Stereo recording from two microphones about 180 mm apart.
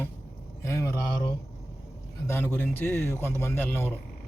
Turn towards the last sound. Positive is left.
turn(degrees=10)  # may be behind; listen again after turning